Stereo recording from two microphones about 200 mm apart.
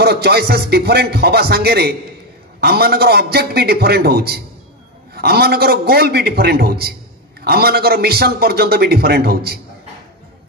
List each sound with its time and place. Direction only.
0.0 s a man's voice: 50° right (ahead or behind)